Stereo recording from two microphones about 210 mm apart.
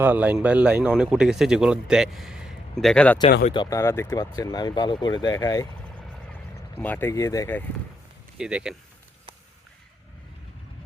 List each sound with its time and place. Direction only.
0.0 s speech: 10° right (ahead or behind)
3.5 s speech: 20° left (ahead or behind)
6.7 s speech: 10° left (ahead or behind)
8.4 s speech: 5° right (ahead or behind)